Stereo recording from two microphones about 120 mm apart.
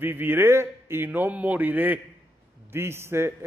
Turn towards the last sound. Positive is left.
turn(degrees=-20)  # may be behind; listen again after turning